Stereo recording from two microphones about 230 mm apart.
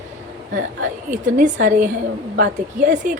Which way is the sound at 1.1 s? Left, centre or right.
Right.